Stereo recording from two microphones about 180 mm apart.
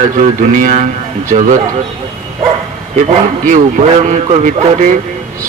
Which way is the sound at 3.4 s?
45° right (ahead or behind).